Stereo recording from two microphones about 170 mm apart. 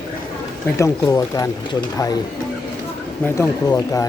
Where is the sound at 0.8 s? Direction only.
20° left (ahead or behind).